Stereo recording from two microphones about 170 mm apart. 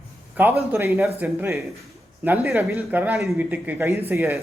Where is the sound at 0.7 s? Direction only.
15° right (ahead or behind).